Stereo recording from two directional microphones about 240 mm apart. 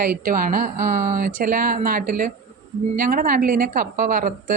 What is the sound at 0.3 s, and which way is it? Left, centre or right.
A woman's voice, right.